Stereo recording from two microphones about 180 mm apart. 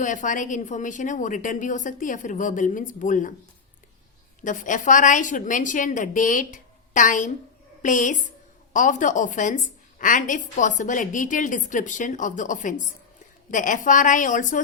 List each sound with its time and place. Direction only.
0.0 s a woman's voice: 45° left (ahead or behind)
4.4 s a woman's voice: 45° left (ahead or behind)